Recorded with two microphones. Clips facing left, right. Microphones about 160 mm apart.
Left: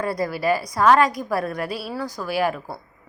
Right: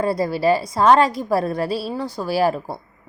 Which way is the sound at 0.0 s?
25° right (ahead or behind).